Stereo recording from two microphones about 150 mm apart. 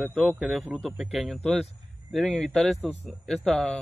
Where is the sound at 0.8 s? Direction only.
5° right (ahead or behind).